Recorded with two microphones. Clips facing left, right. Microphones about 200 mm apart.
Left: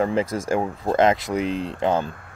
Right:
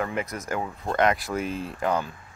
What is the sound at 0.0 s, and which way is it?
Speech, 30° left (ahead or behind).